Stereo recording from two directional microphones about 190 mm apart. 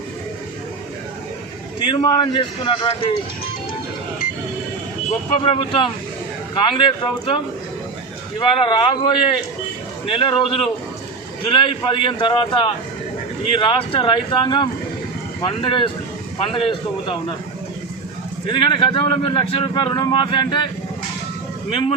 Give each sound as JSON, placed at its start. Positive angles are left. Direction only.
{"t": 1.9, "sound": "speech", "side_deg": 25}
{"t": 5.4, "sound": "speech", "side_deg": 25}
{"t": 8.4, "sound": "speech", "side_deg": 25}
{"t": 18.4, "sound": "speech", "side_deg": 25}
{"t": 21.7, "sound": "speech", "side_deg": 25}